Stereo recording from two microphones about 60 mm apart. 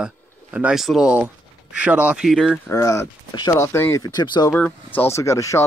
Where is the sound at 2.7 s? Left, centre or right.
Left.